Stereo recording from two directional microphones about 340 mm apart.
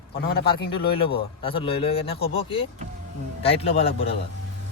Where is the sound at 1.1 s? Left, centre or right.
Centre.